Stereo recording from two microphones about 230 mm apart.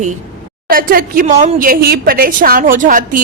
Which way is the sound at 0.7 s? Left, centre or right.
Right.